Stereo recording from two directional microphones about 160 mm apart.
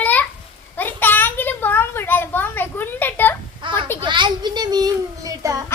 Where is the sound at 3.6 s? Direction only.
30° right (ahead or behind).